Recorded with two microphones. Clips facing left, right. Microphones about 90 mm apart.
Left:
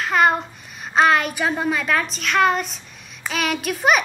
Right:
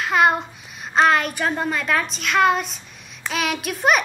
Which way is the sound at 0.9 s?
Centre (ahead or behind).